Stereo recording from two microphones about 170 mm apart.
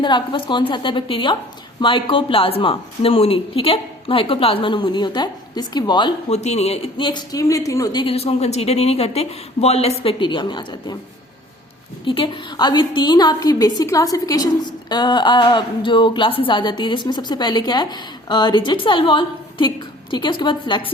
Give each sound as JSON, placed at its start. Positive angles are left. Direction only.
{"t": 0.0, "sound": "a woman's voice", "side_deg": 30}
{"t": 6.3, "sound": "a woman's voice", "side_deg": 40}
{"t": 8.0, "sound": "speech", "side_deg": 35}
{"t": 12.0, "sound": "a woman's voice", "side_deg": 30}